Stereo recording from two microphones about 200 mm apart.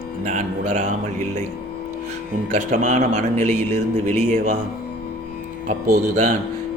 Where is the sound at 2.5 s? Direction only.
35° right (ahead or behind).